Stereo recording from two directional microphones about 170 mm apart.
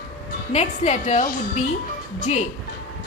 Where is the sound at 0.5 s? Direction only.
40° left (ahead or behind).